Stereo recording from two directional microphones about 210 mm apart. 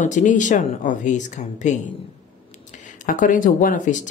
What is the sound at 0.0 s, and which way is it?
Speech, 35° left (ahead or behind).